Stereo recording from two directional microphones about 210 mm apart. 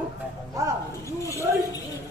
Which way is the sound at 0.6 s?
15° right (ahead or behind).